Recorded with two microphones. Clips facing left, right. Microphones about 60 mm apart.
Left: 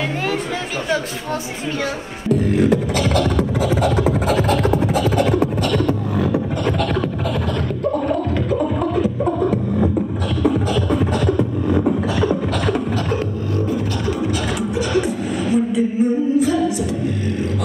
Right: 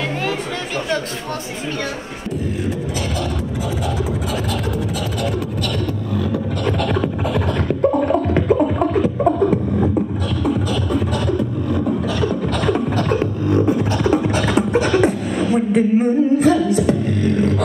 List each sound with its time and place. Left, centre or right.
2.5 s beatboxing: left
3.8 s a sound: left
6.6 s scratch: centre
11.7 s beatboxing: centre
13.5 s beatboxing: right